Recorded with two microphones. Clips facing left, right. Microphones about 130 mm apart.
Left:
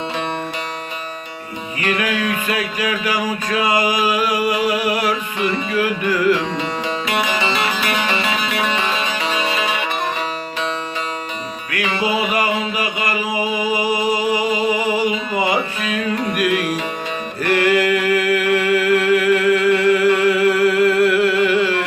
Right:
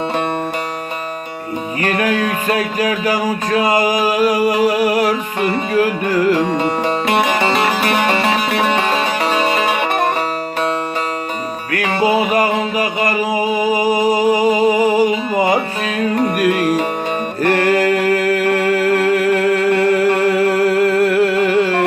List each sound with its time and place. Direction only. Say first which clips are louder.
1.8 s music: right 3 dB; 45° right (ahead or behind)
11.7 s music: right 5 dB; 45° right (ahead or behind)
17.4 s mantra: right 2 dB; 45° right (ahead or behind)